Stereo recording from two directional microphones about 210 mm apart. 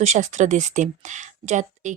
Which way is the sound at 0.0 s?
35° right (ahead or behind).